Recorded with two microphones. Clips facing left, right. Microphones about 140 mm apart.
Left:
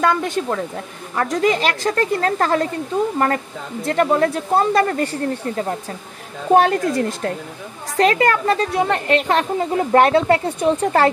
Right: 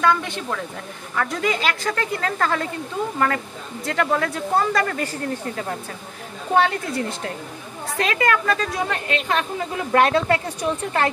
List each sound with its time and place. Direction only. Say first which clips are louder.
0.0 s a woman's voice: left 3 dB; 45° left (ahead or behind)
3.8 s a woman's voice: left 5 dB; 30° left (ahead or behind)
6.5 s speech: left 5 dB; 45° left (ahead or behind)
8.0 s a woman's voice: left 5 dB; 35° left (ahead or behind)